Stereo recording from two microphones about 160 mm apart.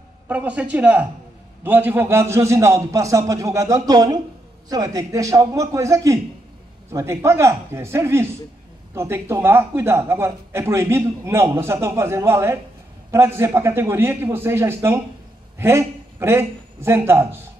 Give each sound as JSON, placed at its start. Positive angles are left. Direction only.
{"t": 0.3, "sound": "a man's voice", "side_deg": -10}